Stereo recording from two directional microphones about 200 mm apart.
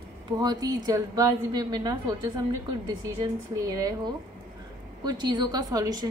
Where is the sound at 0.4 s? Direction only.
20° right (ahead or behind).